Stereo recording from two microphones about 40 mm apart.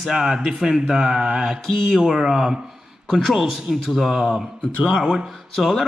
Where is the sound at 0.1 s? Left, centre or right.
Centre.